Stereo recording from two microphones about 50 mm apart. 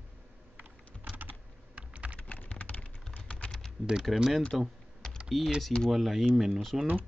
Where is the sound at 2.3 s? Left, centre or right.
Left.